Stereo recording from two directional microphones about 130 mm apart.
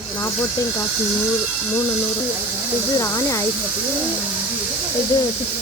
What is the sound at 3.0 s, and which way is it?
Speech, 25° left (ahead or behind).